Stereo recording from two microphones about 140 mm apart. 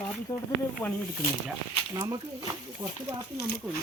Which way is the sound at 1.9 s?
25° right (ahead or behind).